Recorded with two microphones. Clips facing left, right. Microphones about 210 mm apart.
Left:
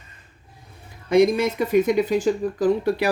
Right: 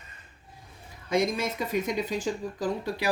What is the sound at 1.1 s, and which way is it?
Speech, 65° left (ahead or behind).